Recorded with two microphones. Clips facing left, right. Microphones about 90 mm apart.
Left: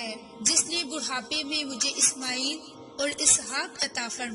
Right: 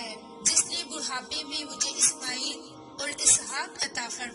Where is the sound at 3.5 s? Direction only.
90° left.